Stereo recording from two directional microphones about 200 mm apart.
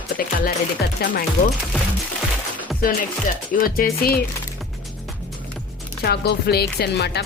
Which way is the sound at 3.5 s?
45° left (ahead or behind).